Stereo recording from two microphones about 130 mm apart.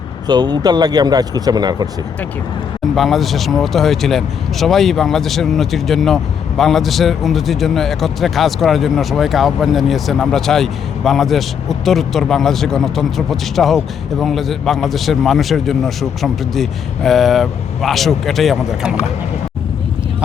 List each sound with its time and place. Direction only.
0.3 s speech: 30° right (ahead or behind)
2.9 s a man's voice: centre (ahead or behind)